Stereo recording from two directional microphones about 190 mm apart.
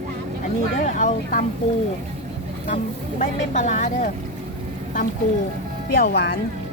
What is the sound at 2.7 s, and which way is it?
Speech, 40° left (ahead or behind).